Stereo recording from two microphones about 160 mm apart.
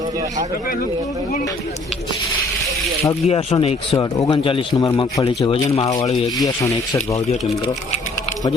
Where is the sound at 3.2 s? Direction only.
40° left (ahead or behind).